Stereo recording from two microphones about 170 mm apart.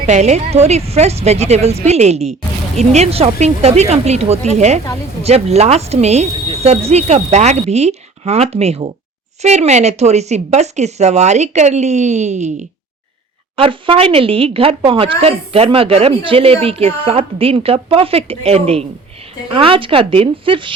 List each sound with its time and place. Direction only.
0.0 s speech: 40° right (ahead or behind)
13.6 s speech: 30° right (ahead or behind)